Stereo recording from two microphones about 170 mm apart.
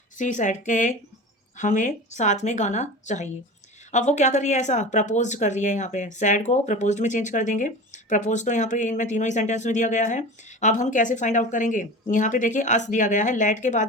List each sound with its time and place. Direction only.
0.2 s speech: 45° left (ahead or behind)